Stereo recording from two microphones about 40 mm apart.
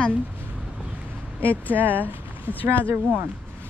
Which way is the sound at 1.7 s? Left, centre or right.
Right.